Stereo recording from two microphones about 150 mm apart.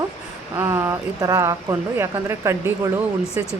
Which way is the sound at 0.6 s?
15° right (ahead or behind).